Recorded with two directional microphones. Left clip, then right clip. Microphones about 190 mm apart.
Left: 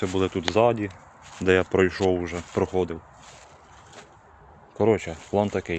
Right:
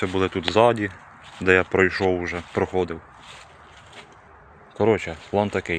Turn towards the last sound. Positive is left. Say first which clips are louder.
# right 2 dB
turn(degrees=5)  # may be behind; listen again after turning